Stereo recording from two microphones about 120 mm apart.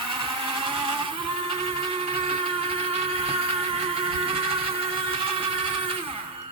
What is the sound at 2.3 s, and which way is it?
Music, 50° right (ahead or behind).